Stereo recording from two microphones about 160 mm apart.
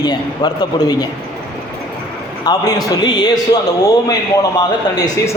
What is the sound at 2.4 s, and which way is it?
Speech, 25° left (ahead or behind).